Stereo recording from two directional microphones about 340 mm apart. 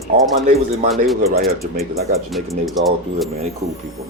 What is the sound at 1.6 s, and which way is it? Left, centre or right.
Speech, right.